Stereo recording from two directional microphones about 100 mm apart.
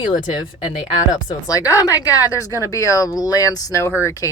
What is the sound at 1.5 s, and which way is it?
Speech, 35° left (ahead or behind).